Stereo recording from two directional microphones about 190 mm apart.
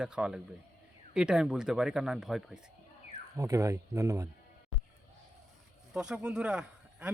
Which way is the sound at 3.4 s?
15° right (ahead or behind).